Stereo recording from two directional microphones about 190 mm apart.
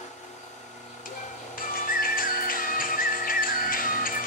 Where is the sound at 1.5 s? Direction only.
50° left (ahead or behind).